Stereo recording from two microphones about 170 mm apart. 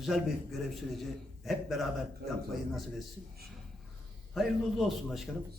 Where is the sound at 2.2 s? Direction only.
65° right (ahead or behind).